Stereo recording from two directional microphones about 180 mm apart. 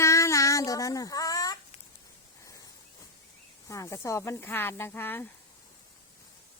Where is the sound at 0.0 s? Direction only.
15° left (ahead or behind).